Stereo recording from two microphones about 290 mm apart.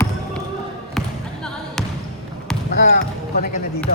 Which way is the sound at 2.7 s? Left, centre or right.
Left.